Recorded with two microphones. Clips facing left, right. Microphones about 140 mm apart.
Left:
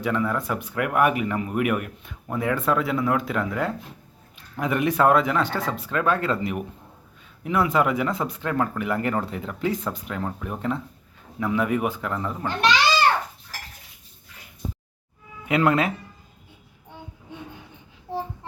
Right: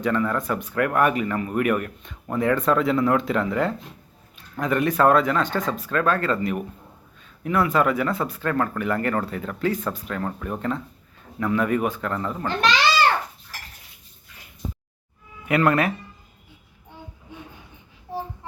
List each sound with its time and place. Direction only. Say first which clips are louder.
0.0 s speech: right 2 dB; 10° left (ahead or behind)
4.5 s speech: right 1 dB; 15° left (ahead or behind)
15.4 s speech: right 1 dB; 15° left (ahead or behind)